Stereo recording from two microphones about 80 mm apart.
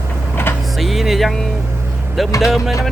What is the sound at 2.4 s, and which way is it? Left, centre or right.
Speech, centre.